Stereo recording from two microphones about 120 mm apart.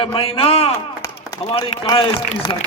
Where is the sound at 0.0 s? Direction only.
50° left (ahead or behind).